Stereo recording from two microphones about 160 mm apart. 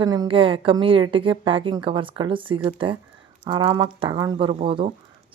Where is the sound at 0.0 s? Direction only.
25° right (ahead or behind).